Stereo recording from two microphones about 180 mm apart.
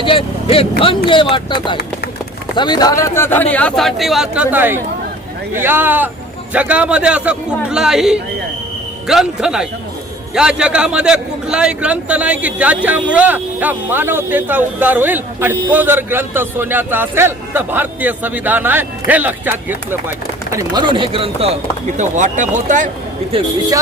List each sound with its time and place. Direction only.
0.0 s a man's voice: 30° left (ahead or behind); by 22.9 s 45° right (ahead or behind)
23.3 s speech: 20° right (ahead or behind)